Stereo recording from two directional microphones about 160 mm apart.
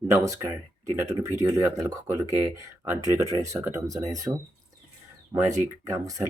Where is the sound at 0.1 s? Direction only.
20° right (ahead or behind).